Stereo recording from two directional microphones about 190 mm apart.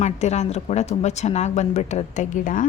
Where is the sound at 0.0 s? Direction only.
35° left (ahead or behind).